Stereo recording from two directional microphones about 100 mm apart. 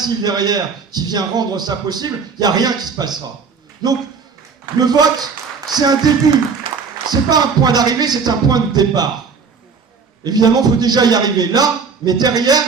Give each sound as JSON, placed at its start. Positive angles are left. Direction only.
{"t": 0.0, "sound": "a man's voice", "side_deg": -45}
{"t": 7.1, "sound": "a man's voice", "side_deg": -40}
{"t": 10.2, "sound": "a man's voice", "side_deg": -45}